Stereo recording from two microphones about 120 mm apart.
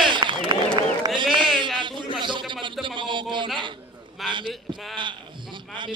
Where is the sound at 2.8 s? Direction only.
40° right (ahead or behind).